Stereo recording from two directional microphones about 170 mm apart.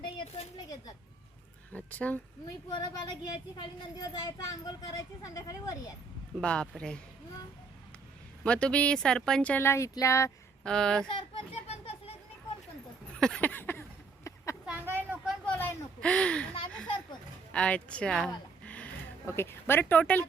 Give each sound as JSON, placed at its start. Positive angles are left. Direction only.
{"t": 0.0, "sound": "a sound", "side_deg": 35}
{"t": 1.7, "sound": "speech", "side_deg": 10}
{"t": 2.7, "sound": "speech", "side_deg": 25}
{"t": 6.4, "sound": "speech", "side_deg": 5}
{"t": 8.4, "sound": "speech", "side_deg": 5}
{"t": 10.6, "sound": "speech", "side_deg": 5}
{"t": 11.1, "sound": "children playing", "side_deg": 30}
{"t": 13.1, "sound": "a sound", "side_deg": 5}
{"t": 14.7, "sound": "a sound", "side_deg": -10}
{"t": 15.4, "sound": "speech", "side_deg": 10}
{"t": 17.5, "sound": "speech", "side_deg": 5}